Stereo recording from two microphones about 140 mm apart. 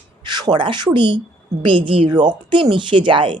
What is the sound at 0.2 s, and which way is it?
Speech, 30° right (ahead or behind).